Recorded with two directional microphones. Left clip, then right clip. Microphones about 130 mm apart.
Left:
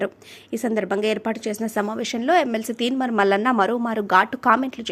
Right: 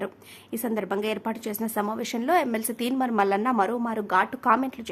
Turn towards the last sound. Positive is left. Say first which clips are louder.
# left 4 dB
turn(degrees=25)  # may be behind; listen again after turning